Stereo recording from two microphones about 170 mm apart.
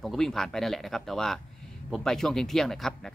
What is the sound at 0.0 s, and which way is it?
A man's voice, centre (ahead or behind).